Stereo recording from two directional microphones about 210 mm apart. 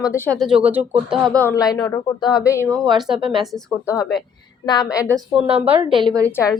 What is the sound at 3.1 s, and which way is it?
Speech, 25° right (ahead or behind).